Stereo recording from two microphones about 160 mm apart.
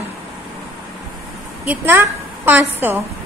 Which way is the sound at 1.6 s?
15° right (ahead or behind).